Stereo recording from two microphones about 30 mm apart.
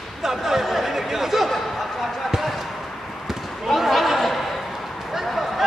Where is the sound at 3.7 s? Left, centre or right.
Centre.